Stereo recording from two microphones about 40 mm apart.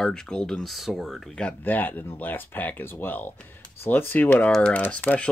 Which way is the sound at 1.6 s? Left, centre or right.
Left.